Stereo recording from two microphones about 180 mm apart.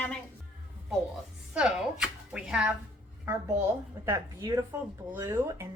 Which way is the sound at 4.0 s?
15° right (ahead or behind).